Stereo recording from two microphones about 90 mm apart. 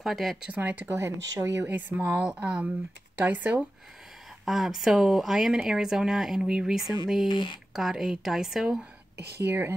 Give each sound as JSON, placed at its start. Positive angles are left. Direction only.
{"t": 0.0, "sound": "speech", "side_deg": 0}
{"t": 0.5, "sound": "a woman's voice", "side_deg": -20}
{"t": 4.5, "sound": "speech", "side_deg": 0}
{"t": 7.2, "sound": "speech", "side_deg": 60}
{"t": 7.7, "sound": "speech", "side_deg": -5}
{"t": 9.4, "sound": "speech", "side_deg": -25}